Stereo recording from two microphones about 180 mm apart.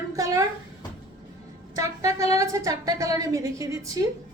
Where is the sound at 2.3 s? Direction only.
20° right (ahead or behind).